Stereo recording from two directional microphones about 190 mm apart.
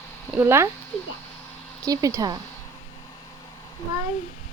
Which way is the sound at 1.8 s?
20° right (ahead or behind).